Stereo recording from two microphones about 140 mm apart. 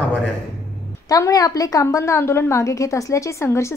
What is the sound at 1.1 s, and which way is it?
A woman's voice, 25° left (ahead or behind).